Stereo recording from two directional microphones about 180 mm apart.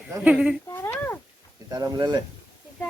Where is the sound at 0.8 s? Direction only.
10° left (ahead or behind).